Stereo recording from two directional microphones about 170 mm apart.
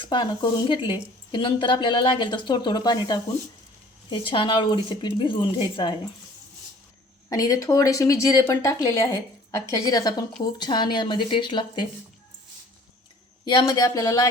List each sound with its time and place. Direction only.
0.0 s speech: 30° left (ahead or behind)
7.3 s speech: 20° left (ahead or behind)
13.4 s speech: 25° left (ahead or behind)